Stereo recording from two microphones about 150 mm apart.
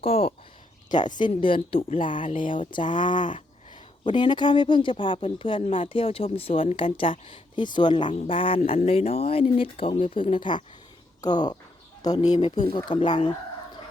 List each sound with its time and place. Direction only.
0.0 s speech: 40° left (ahead or behind)
0.9 s speech: 30° left (ahead or behind)
2.4 s speech: 60° left (ahead or behind)
2.6 s speech: 35° left (ahead or behind)
12.4 s speech: 45° left (ahead or behind)
12.7 s speech: 35° left (ahead or behind)